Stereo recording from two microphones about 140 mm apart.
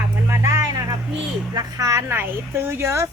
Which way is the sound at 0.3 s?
20° right (ahead or behind).